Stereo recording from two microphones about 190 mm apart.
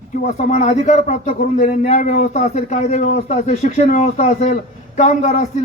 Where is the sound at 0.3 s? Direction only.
35° left (ahead or behind).